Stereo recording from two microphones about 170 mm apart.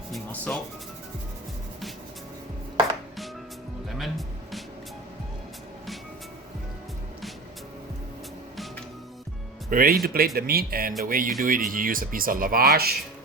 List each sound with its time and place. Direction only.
0.1 s music: 5° left (ahead or behind)
3.8 s music: centre (ahead or behind)
9.6 s speech: 55° right (ahead or behind)